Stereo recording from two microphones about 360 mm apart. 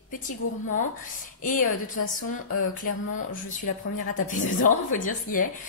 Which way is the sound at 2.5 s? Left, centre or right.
Left.